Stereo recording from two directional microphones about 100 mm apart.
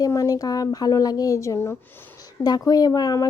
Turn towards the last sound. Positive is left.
turn(degrees=35)  # may be behind; listen again after turning